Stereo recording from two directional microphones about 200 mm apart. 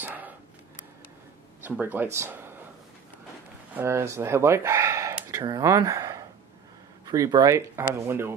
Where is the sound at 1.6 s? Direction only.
10° right (ahead or behind).